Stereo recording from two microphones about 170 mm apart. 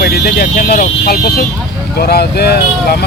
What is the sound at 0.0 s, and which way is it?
Speech, 65° left (ahead or behind).